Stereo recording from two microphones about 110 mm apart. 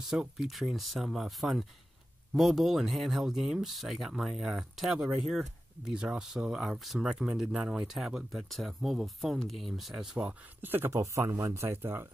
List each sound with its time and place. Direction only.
0.0 s speech: 5° right (ahead or behind)
10.6 s speech: 20° right (ahead or behind)